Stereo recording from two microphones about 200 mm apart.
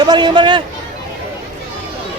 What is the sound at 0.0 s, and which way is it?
Speech, 20° right (ahead or behind).